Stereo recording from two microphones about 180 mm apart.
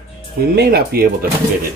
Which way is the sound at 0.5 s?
60° right (ahead or behind).